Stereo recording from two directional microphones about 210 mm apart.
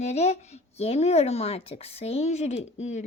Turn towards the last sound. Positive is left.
turn(degrees=30)  # may be behind; listen again after turning